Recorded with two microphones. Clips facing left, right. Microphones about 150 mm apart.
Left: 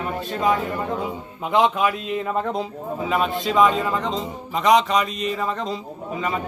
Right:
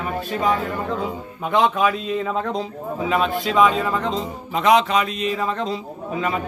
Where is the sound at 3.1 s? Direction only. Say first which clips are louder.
Right 1 dB; 5° left (ahead or behind).